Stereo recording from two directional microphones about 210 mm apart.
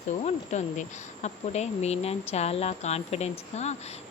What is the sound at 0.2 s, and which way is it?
A woman's voice, 35° left (ahead or behind).